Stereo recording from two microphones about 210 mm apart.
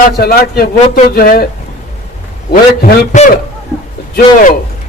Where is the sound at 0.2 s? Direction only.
45° left (ahead or behind).